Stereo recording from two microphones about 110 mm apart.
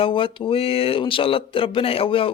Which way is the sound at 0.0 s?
50° left (ahead or behind).